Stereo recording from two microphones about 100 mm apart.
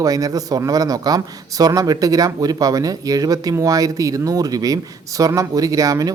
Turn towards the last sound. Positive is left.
turn(degrees=-35)  # may be behind; listen again after turning